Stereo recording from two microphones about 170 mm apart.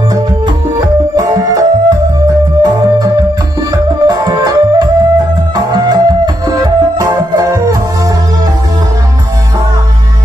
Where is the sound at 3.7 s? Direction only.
20° right (ahead or behind).